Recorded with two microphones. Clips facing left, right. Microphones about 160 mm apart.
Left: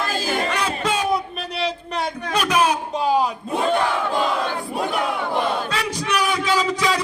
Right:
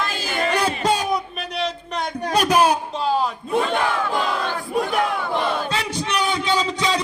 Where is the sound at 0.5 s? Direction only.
35° right (ahead or behind).